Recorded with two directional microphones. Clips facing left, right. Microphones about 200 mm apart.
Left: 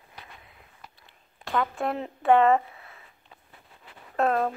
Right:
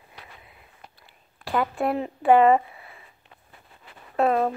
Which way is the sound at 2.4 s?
10° right (ahead or behind).